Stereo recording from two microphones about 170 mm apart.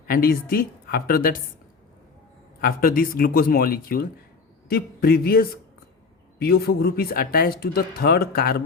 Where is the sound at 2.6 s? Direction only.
60° left (ahead or behind).